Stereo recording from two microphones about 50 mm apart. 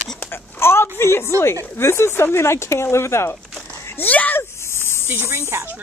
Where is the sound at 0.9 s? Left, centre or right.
Left.